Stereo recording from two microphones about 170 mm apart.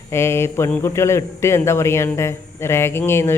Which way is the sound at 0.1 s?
15° left (ahead or behind).